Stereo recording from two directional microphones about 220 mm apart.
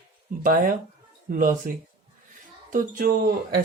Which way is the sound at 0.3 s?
35° right (ahead or behind).